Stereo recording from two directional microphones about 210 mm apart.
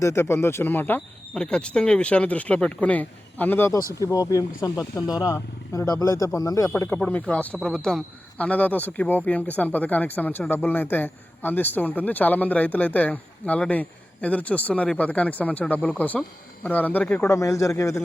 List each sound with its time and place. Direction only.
0.0 s speech: 10° left (ahead or behind)